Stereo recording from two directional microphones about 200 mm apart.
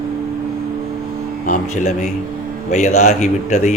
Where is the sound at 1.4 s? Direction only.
40° left (ahead or behind).